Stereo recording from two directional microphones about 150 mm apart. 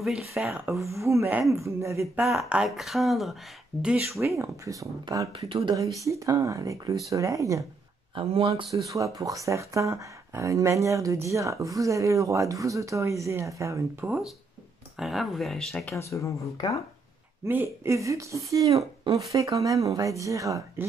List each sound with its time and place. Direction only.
0.0 s speech: centre (ahead or behind); by 2.2 s 20° right (ahead or behind)
2.2 s speech: 5° right (ahead or behind)
4.4 s speech: 20° right (ahead or behind)
5.5 s speech: 35° right (ahead or behind)
6.0 s speech: 20° right (ahead or behind)
8.1 s speech: 35° right (ahead or behind)
8.7 s speech: 20° right (ahead or behind)
15.0 s speech: centre (ahead or behind)
16.0 s speech: 20° left (ahead or behind)
17.5 s speech: 15° right (ahead or behind)